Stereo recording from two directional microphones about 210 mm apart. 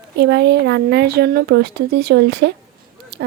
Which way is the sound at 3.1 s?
50° right (ahead or behind).